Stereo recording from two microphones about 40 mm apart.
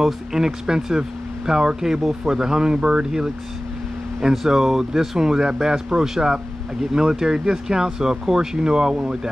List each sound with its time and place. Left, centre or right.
0.0 s speech: centre